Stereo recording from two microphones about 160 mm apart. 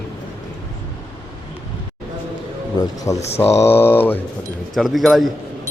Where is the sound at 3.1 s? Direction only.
20° left (ahead or behind).